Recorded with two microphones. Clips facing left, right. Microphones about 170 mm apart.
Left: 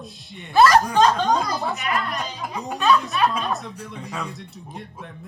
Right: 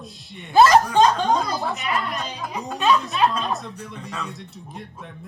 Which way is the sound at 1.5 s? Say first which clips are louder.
Even; centre (ahead or behind).